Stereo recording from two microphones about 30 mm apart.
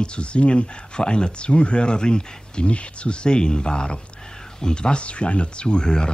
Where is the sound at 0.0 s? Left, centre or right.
Left.